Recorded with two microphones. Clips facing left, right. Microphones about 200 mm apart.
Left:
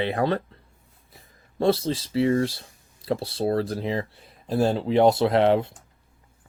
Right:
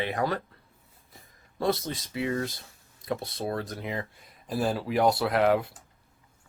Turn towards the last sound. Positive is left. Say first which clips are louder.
# left 4 dB
turn(degrees=25)  # may be behind; listen again after turning